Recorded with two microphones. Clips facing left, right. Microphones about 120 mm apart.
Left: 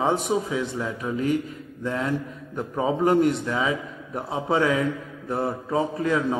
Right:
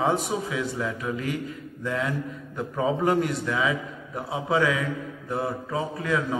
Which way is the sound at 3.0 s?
30° left (ahead or behind).